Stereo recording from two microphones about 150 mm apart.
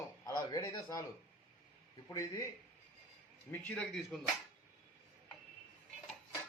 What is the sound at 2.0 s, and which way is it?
Speech, 20° left (ahead or behind).